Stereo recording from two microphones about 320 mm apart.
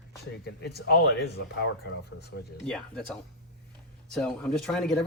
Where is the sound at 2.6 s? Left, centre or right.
Centre.